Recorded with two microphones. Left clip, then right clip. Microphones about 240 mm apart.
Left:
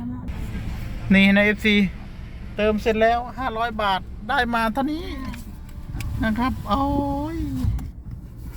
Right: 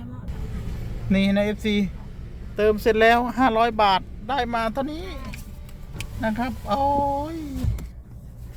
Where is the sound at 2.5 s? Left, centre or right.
Right.